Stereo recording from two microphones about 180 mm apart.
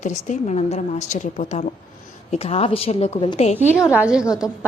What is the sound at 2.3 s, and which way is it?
A woman's voice, 35° left (ahead or behind).